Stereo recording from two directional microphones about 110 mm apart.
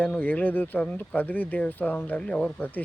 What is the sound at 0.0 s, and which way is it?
Speech, 15° left (ahead or behind).